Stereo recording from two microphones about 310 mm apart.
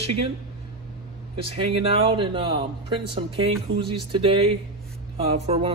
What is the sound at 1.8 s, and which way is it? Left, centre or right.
Speech, centre.